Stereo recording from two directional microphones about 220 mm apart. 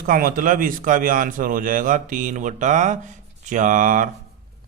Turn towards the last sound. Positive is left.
turn(degrees=-35)  # may be behind; listen again after turning